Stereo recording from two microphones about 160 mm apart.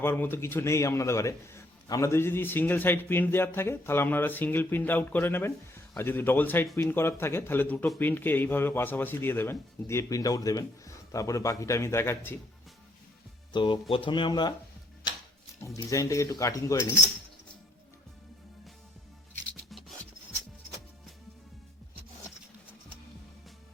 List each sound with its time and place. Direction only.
0.0 s a man's voice: 15° left (ahead or behind)
13.5 s speech: 30° left (ahead or behind)
15.6 s speech: 20° left (ahead or behind)